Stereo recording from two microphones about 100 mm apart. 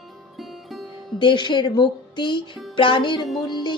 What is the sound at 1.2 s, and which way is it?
Speech, 50° left (ahead or behind).